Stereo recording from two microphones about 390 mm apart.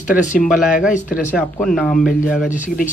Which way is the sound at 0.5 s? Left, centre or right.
Centre.